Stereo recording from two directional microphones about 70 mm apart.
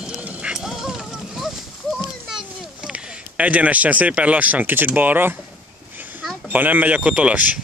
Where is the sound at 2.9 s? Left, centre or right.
Centre.